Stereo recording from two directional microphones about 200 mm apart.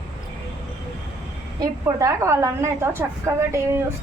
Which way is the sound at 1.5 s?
15° right (ahead or behind).